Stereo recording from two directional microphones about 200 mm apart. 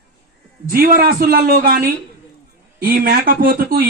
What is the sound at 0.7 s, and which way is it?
Speech, 50° right (ahead or behind).